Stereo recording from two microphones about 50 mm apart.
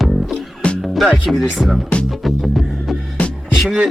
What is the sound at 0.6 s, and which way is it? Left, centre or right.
Music, left.